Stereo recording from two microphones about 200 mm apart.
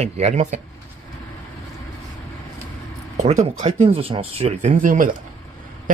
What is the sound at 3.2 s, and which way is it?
Speech, 30° right (ahead or behind).